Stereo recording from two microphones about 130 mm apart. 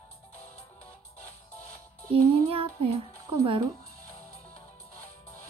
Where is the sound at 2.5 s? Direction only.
45° right (ahead or behind).